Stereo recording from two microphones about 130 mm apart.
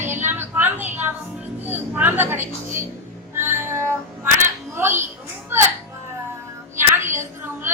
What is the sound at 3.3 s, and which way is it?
Music, 20° right (ahead or behind).